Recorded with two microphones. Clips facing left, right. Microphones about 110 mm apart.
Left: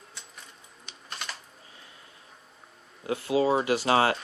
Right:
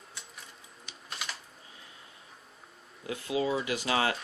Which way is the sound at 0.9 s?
Centre (ahead or behind).